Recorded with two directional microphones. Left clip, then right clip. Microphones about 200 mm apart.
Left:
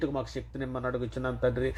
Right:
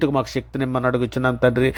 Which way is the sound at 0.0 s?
40° right (ahead or behind).